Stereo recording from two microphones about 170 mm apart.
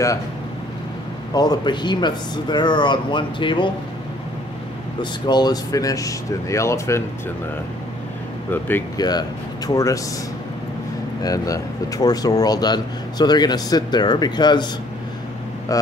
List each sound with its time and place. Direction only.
1.3 s speech: 25° left (ahead or behind)
5.2 s speech: 25° left (ahead or behind)
8.5 s speech: 10° left (ahead or behind)
8.9 s speech: 25° left (ahead or behind)
11.2 s speech: 20° left (ahead or behind)
15.7 s speech: 20° left (ahead or behind)